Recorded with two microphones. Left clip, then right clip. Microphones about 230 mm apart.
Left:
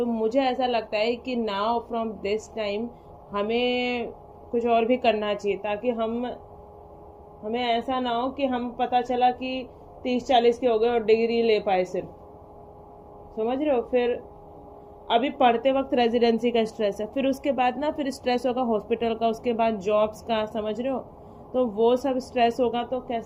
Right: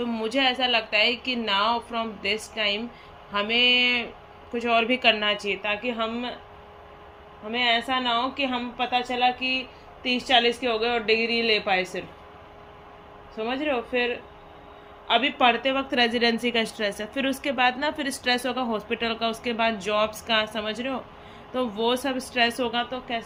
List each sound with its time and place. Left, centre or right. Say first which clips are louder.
0.0 s speech: left 1 dB; centre
7.4 s speech: right 2 dB; centre
13.3 s speech: left 3 dB; centre